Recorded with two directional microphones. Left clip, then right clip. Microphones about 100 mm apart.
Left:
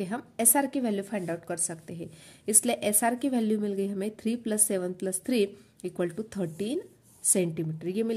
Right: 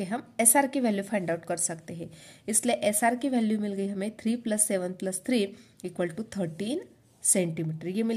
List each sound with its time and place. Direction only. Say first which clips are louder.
0.0 s a woman's voice: right 2 dB; 30° left (ahead or behind)